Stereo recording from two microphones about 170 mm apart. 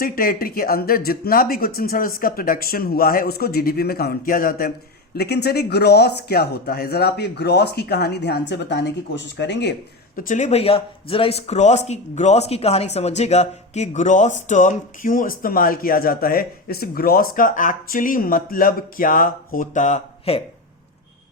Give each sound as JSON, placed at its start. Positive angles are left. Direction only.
{"t": 0.0, "sound": "speech", "side_deg": 60}
{"t": 5.1, "sound": "speech", "side_deg": 70}
{"t": 10.2, "sound": "speech", "side_deg": 50}